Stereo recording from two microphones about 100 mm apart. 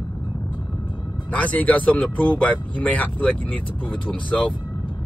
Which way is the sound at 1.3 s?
15° left (ahead or behind).